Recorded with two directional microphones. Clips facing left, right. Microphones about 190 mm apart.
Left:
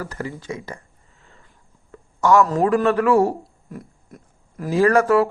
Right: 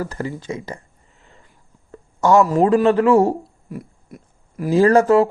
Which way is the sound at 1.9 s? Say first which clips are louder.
Right 2 dB; 35° right (ahead or behind).